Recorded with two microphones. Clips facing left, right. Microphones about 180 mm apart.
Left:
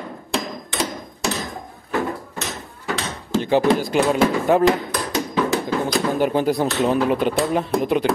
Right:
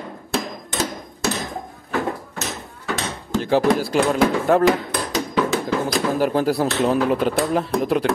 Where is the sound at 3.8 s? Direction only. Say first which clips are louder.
Even; centre (ahead or behind).